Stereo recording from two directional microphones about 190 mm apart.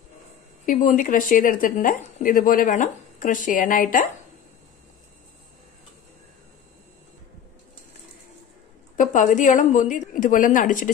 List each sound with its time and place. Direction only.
0.7 s speech: 45° left (ahead or behind)
8.9 s speech: 45° left (ahead or behind)